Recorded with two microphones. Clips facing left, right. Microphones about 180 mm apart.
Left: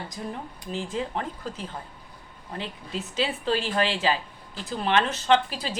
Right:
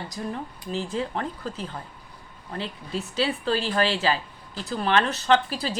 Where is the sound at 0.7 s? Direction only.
15° left (ahead or behind).